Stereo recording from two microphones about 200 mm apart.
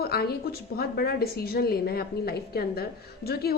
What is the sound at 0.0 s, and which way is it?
A woman's voice, 50° left (ahead or behind).